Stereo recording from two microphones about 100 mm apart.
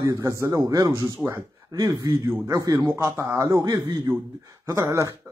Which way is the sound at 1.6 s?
40° right (ahead or behind).